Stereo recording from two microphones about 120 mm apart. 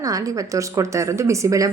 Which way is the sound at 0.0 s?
30° right (ahead or behind).